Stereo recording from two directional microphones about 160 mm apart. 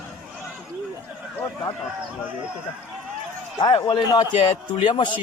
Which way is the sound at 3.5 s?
30° left (ahead or behind).